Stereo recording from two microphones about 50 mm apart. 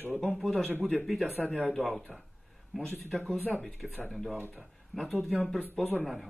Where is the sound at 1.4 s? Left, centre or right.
Left.